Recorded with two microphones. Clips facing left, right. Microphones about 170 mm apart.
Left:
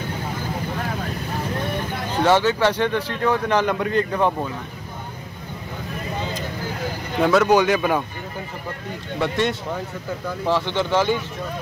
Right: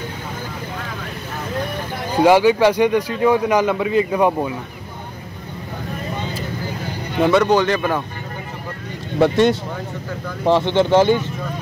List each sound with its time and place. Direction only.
2.1 s a man's voice: 10° right (ahead or behind)
7.2 s speech: centre (ahead or behind)
9.2 s speech: 35° right (ahead or behind)
10.4 s speech: 25° right (ahead or behind)